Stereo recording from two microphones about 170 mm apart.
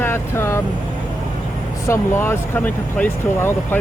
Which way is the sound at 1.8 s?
15° left (ahead or behind).